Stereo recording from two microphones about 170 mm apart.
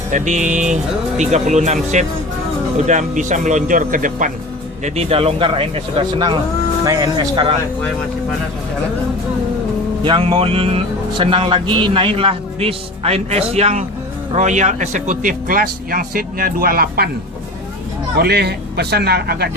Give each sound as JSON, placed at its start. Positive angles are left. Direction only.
{"t": 0.1, "sound": "speech", "side_deg": -45}
{"t": 4.8, "sound": "speech", "side_deg": -35}
{"t": 10.0, "sound": "speech", "side_deg": -30}
{"t": 18.2, "sound": "speech", "side_deg": -70}